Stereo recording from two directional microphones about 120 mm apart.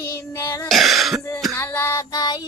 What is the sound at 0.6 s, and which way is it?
Throat clearing, centre (ahead or behind).